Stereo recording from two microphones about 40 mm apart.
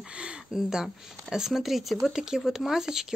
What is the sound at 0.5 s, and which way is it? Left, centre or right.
Speech, centre.